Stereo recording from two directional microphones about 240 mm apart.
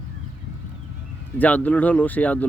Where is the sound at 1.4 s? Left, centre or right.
Centre.